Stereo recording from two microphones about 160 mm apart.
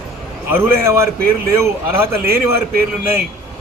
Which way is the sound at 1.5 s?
15° right (ahead or behind).